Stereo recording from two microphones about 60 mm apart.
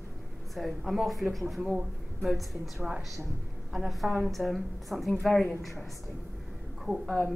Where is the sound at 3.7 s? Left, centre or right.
Centre.